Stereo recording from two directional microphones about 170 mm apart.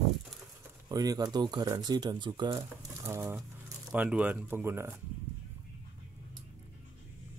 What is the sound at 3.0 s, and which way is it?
Speech, 15° right (ahead or behind).